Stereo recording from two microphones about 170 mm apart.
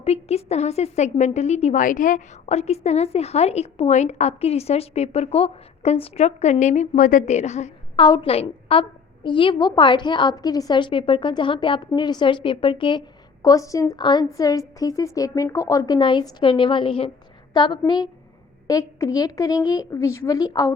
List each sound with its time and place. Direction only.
0.0 s a woman's voice: 35° left (ahead or behind)
7.9 s a woman's voice: 25° left (ahead or behind)